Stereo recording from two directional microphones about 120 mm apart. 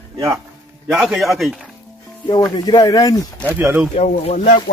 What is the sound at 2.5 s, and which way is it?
Speech, 35° left (ahead or behind).